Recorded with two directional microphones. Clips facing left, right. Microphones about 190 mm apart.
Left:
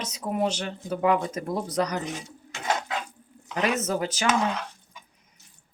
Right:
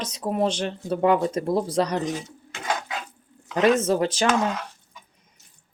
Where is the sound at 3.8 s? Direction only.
30° right (ahead or behind).